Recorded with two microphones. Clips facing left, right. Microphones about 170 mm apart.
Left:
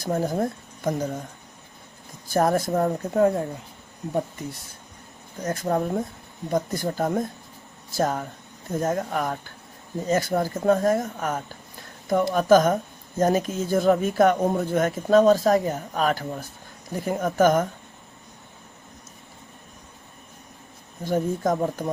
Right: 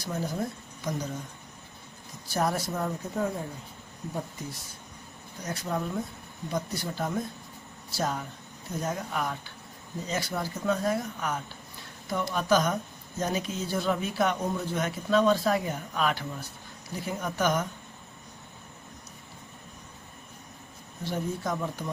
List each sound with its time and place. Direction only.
0.0 s speech: 50° left (ahead or behind)
2.3 s speech: 50° left (ahead or behind)
5.4 s speech: 50° left (ahead or behind)
21.0 s speech: 45° left (ahead or behind)